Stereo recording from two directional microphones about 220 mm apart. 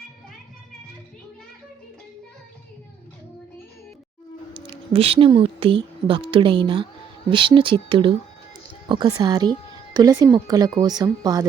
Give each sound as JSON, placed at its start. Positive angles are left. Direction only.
{"t": 4.5, "sound": "a woman's voice", "side_deg": -20}